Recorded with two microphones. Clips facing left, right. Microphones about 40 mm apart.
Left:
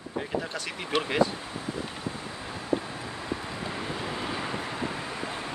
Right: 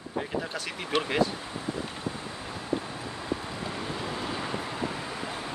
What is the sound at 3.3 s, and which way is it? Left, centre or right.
Vehicle, centre.